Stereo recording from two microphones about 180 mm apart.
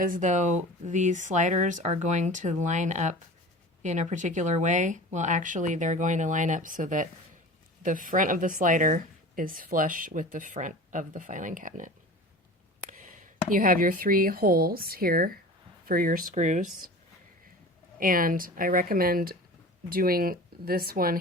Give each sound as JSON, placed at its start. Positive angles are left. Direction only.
{"t": 0.0, "sound": "a woman's voice", "side_deg": -45}
{"t": 12.9, "sound": "a woman's voice", "side_deg": -45}
{"t": 18.0, "sound": "a woman's voice", "side_deg": -50}